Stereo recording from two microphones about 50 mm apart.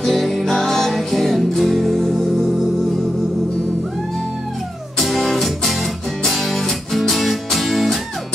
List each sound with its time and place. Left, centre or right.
0.0 s music: centre
4.9 s music: centre